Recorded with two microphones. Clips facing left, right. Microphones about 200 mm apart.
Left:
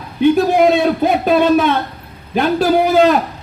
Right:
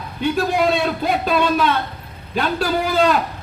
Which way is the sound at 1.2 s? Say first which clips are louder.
Left 6 dB; 50° left (ahead or behind).